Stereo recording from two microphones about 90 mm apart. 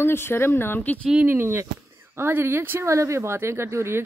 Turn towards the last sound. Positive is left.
turn(degrees=-30)  # may be behind; listen again after turning